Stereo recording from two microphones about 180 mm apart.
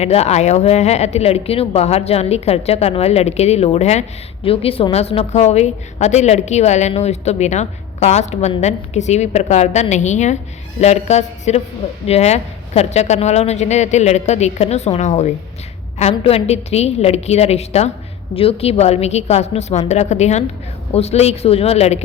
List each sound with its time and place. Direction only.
0.0 s a woman's voice: 35° left (ahead or behind)